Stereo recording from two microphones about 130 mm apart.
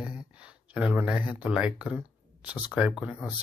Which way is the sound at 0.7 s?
10° right (ahead or behind).